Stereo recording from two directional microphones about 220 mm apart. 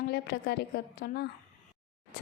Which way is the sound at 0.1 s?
45° left (ahead or behind).